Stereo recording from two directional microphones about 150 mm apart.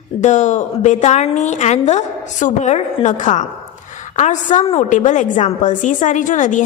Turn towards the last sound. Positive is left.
turn(degrees=55)  # may be behind; listen again after turning